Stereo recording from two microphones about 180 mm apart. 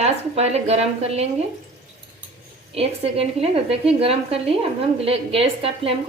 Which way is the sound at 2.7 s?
35° right (ahead or behind).